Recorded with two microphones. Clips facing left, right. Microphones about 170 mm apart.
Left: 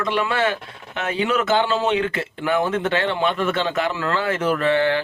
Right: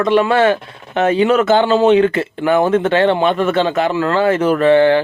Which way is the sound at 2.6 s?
55° right (ahead or behind).